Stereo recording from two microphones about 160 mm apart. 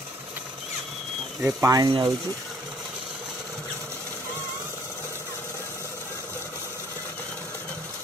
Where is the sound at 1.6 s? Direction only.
20° right (ahead or behind).